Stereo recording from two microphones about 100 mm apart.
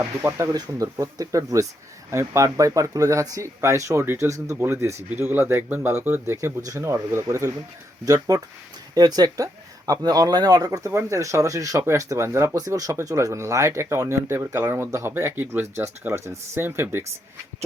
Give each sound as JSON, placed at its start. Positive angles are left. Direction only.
{"t": 0.0, "sound": "speech", "side_deg": -25}
{"t": 0.5, "sound": "speech", "side_deg": -35}